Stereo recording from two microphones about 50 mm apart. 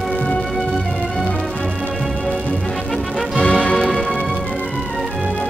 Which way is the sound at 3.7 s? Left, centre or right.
Centre.